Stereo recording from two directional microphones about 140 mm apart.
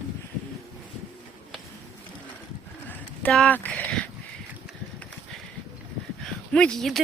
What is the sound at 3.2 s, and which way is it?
Speech, 10° left (ahead or behind).